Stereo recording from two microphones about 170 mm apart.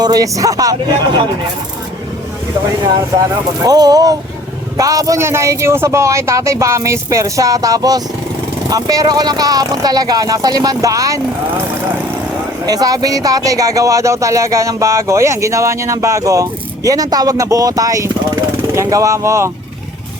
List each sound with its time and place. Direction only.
0.0 s speech: 20° right (ahead or behind)
3.6 s speech: 20° right (ahead or behind)
12.6 s speech: 20° right (ahead or behind)